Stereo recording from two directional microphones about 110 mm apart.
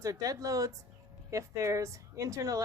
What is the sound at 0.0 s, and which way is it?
A woman's voice, 30° right (ahead or behind).